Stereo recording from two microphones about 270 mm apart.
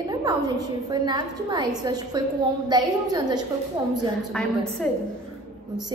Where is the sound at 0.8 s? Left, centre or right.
Centre.